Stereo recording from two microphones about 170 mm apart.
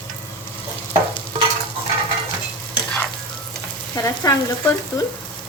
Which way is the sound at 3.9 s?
20° left (ahead or behind).